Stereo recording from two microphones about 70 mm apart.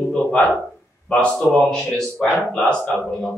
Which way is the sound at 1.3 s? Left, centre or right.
Centre.